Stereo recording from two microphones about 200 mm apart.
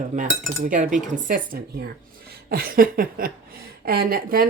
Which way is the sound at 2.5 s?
45° right (ahead or behind).